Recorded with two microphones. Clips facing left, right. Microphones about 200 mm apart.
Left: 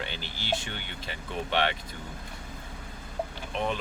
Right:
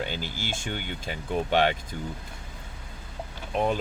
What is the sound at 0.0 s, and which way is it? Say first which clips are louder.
Speech: right 5 dB; 45° right (ahead or behind).